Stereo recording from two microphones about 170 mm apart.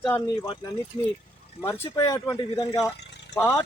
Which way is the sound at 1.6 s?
15° left (ahead or behind).